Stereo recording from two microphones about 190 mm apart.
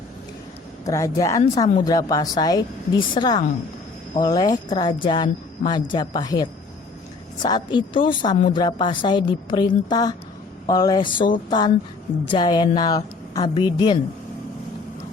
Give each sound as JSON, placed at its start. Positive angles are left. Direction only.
{"t": 0.9, "sound": "a woman's voice", "side_deg": 15}